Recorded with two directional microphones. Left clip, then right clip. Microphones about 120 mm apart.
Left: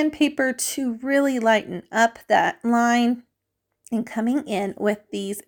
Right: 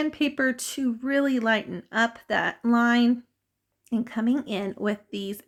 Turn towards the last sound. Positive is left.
turn(degrees=30)  # may be behind; listen again after turning